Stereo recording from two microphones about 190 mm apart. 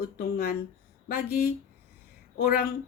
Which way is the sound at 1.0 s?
50° left (ahead or behind).